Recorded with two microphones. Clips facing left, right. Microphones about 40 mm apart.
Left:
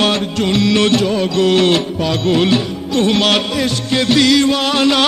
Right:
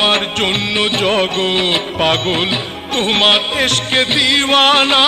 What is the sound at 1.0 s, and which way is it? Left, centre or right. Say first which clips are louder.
Music: even; right.